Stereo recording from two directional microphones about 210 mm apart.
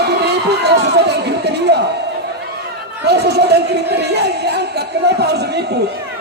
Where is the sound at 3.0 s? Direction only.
50° right (ahead or behind).